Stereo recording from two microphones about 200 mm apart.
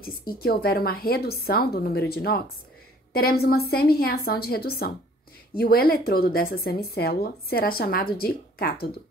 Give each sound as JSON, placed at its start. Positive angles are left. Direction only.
{"t": 0.0, "sound": "a woman's voice", "side_deg": 50}